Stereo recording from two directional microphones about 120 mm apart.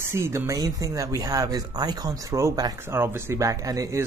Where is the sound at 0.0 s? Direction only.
20° right (ahead or behind).